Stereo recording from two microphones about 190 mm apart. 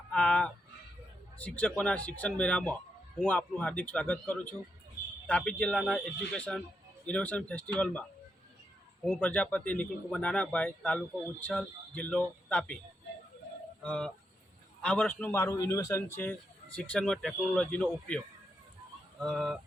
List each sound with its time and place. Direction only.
0.1 s a sound: 5° left (ahead or behind)
1.4 s speech: 5° left (ahead or behind)
9.0 s speech: 5° left (ahead or behind)
13.8 s a man's voice: 5° left (ahead or behind)
19.2 s speech: centre (ahead or behind)